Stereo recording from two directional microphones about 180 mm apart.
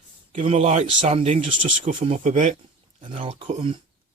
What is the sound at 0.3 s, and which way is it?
Speech, 35° right (ahead or behind).